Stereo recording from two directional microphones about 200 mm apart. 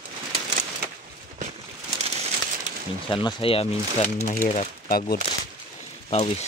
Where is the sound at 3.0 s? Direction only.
25° left (ahead or behind).